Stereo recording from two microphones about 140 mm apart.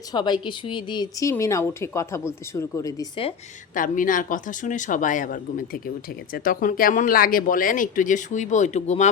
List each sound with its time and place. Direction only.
0.1 s a woman's voice: 30° left (ahead or behind)
3.8 s speech: 70° left (ahead or behind); by 9.0 s 55° left (ahead or behind)